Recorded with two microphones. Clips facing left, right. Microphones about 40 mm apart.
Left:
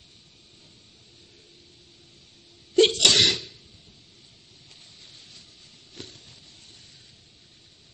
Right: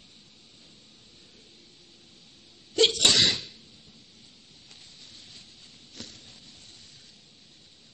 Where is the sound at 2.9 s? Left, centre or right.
Left.